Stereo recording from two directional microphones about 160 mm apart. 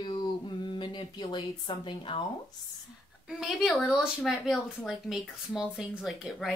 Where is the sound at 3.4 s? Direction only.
Centre (ahead or behind).